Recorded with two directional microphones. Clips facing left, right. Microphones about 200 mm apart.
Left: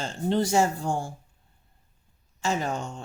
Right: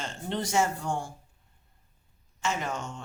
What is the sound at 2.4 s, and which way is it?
Speech, 35° left (ahead or behind).